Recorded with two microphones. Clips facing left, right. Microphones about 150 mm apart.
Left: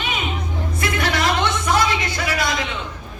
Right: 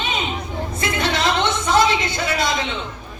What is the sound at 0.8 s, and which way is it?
Music, 25° right (ahead or behind).